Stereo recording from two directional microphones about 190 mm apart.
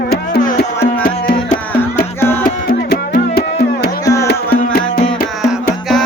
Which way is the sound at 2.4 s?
50° left (ahead or behind).